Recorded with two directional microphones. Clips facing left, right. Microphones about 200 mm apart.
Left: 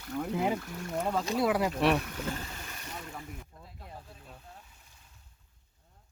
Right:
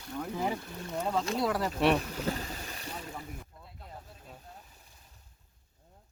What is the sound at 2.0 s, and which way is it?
Boat, 35° right (ahead or behind).